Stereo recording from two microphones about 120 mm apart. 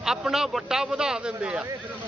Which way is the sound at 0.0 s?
5° right (ahead or behind).